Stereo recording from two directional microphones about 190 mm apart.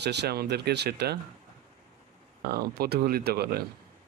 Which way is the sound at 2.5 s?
55° right (ahead or behind).